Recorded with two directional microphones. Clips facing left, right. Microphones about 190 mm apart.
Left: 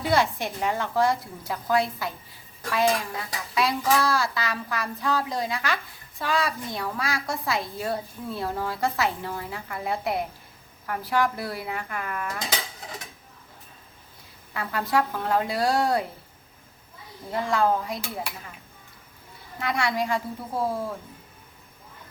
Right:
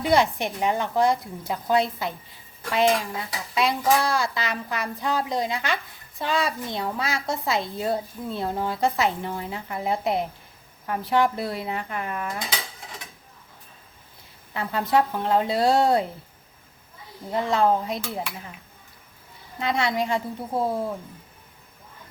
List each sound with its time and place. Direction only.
0.0 s dishes: 20° right (ahead or behind)
14.5 s dishes: 25° right (ahead or behind)
17.3 s dishes: 20° right (ahead or behind)
19.5 s dishes: 20° right (ahead or behind)